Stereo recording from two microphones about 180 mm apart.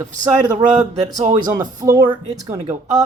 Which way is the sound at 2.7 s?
40° right (ahead or behind).